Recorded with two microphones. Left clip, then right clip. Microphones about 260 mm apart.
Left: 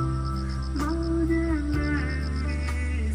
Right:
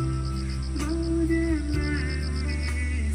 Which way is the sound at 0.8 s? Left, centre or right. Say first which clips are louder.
Even; left.